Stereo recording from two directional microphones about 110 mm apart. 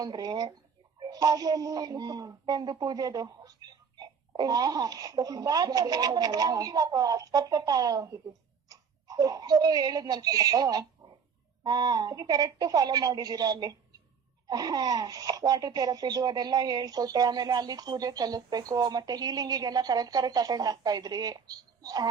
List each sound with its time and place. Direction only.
0.0 s speech: 35° right (ahead or behind)